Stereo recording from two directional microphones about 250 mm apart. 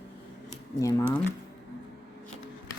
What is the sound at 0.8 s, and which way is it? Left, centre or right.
Speech, centre.